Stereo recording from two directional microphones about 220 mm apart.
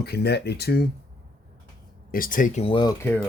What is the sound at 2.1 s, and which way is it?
Speech, 40° left (ahead or behind).